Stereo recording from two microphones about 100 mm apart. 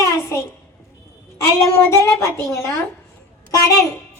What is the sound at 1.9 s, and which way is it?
Speech, 25° left (ahead or behind).